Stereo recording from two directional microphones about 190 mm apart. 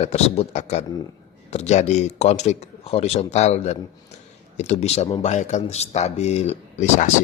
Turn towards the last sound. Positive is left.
turn(degrees=40)  # may be behind; listen again after turning